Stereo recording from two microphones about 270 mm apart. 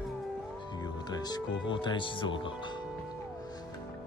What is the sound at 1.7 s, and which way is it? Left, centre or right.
Speech, centre.